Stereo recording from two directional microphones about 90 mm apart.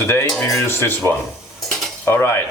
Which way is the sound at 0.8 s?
20° left (ahead or behind).